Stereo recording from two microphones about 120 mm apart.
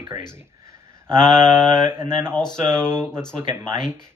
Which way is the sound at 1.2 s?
85° left.